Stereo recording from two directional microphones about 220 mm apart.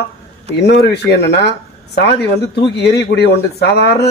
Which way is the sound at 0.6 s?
50° left (ahead or behind).